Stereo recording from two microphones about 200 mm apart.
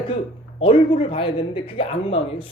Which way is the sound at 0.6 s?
25° left (ahead or behind).